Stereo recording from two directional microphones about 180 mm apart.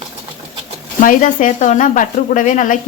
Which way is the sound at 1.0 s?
50° left (ahead or behind).